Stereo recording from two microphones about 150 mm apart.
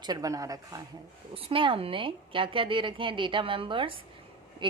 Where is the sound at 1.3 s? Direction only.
35° right (ahead or behind).